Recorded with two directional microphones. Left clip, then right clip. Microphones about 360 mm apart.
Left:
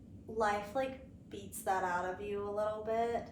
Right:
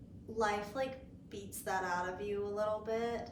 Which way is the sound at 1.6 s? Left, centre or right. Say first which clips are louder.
Left 2 dB; centre.